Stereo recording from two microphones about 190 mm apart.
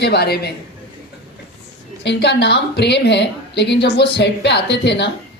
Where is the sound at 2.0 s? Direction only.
65° left (ahead or behind).